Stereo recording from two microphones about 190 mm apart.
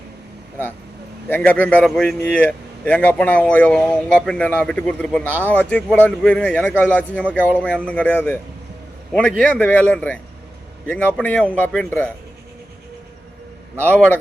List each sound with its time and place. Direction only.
1.3 s a man's voice: 10° left (ahead or behind)
9.4 s a man's voice: 5° left (ahead or behind)
13.8 s a man's voice: 10° left (ahead or behind)